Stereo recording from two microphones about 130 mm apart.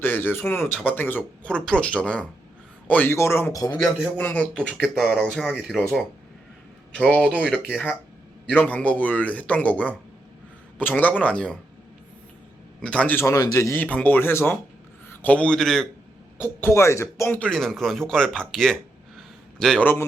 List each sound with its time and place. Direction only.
0.0 s speech: 15° left (ahead or behind)
4.2 s speech: 10° left (ahead or behind)
7.2 s speech: 5° right (ahead or behind)
8.6 s speech: 10° left (ahead or behind)
12.8 s speech: 10° left (ahead or behind)
16.4 s speech: 15° left (ahead or behind)
17.5 s a man's voice: 5° left (ahead or behind)